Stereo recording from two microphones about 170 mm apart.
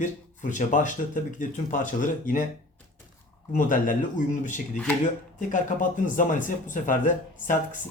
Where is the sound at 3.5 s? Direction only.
50° left (ahead or behind).